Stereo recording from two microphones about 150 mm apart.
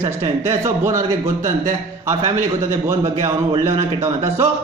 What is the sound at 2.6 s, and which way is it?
A man's voice, 20° right (ahead or behind).